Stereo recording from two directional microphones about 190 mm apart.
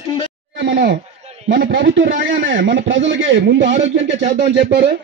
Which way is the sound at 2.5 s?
75° right (ahead or behind).